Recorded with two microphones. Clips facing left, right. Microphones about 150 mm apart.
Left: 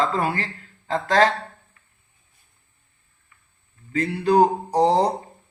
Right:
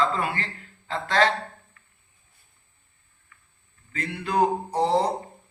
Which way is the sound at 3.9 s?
35° left (ahead or behind).